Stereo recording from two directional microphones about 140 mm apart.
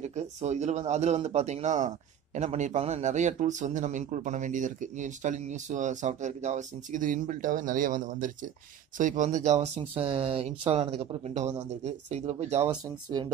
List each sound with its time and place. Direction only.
0.0 s a man's voice: 55° right (ahead or behind)
9.8 s a man's voice: 45° right (ahead or behind)